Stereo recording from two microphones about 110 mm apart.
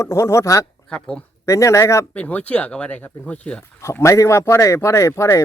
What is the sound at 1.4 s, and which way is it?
Speech, 30° left (ahead or behind).